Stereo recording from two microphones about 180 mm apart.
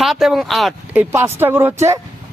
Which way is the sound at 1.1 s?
10° right (ahead or behind).